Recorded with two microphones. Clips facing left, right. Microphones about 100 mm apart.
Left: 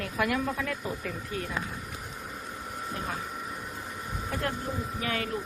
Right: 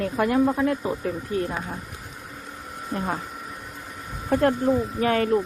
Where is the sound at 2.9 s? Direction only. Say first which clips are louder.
Right 9 dB; 45° right (ahead or behind).